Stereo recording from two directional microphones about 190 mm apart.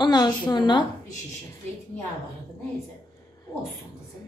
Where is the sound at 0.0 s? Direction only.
20° left (ahead or behind).